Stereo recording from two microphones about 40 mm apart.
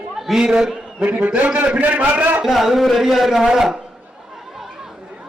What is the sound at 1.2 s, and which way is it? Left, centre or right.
A man's voice, right.